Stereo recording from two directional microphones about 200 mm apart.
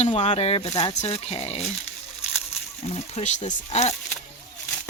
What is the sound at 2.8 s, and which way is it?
Speech, 30° left (ahead or behind).